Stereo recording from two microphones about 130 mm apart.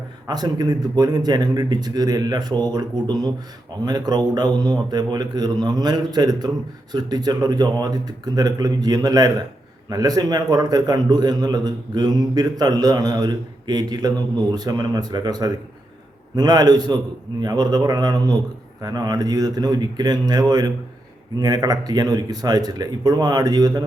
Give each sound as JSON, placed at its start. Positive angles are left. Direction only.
{"t": 0.3, "sound": "a man's voice", "side_deg": -30}